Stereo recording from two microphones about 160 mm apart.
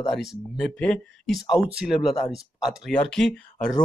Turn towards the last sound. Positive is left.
turn(degrees=5)  # may be behind; listen again after turning